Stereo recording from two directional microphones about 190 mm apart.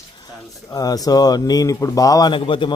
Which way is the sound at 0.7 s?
20° left (ahead or behind).